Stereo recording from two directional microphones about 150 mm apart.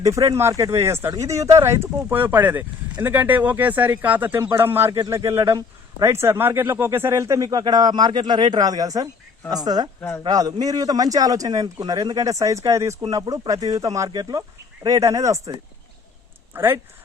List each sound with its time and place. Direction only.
0.0 s a man's voice: 20° right (ahead or behind)
16.5 s speech: 15° right (ahead or behind)